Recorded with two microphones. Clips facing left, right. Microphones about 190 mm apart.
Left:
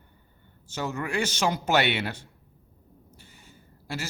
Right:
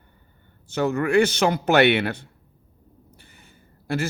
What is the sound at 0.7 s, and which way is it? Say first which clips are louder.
A man's voice: right 10 dB; 60° right (ahead or behind).